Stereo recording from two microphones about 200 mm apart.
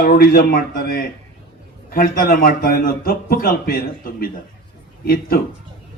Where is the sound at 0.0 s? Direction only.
45° left (ahead or behind).